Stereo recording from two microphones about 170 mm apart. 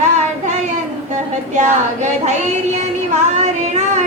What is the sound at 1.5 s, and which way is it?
Child singing, 45° right (ahead or behind).